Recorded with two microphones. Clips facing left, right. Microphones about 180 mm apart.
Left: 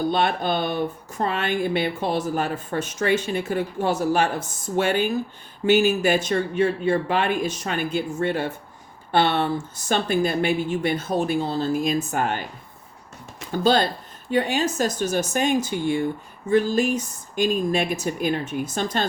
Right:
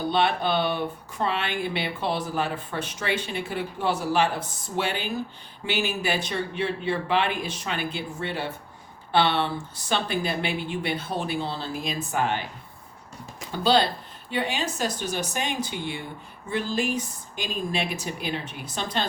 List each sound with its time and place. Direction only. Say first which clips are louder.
0.1 s speech: left 1 dB; 45° left (ahead or behind)
13.5 s speech: left 2 dB; 45° left (ahead or behind)